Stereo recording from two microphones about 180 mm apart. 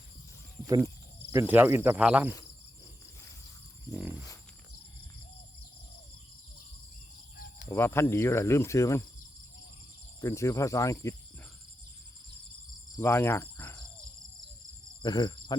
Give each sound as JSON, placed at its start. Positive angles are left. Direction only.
{"t": 1.3, "sound": "speech", "side_deg": -10}
{"t": 7.7, "sound": "speech", "side_deg": 15}
{"t": 10.2, "sound": "speech", "side_deg": 15}
{"t": 13.0, "sound": "speech", "side_deg": 15}
{"t": 15.0, "sound": "speech", "side_deg": 25}